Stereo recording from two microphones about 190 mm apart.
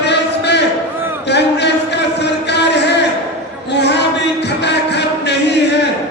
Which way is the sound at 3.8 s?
65° left (ahead or behind).